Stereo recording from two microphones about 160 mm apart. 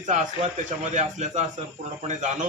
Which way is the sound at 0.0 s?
50° right (ahead or behind).